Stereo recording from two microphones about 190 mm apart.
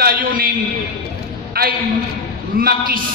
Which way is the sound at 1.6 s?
50° right (ahead or behind).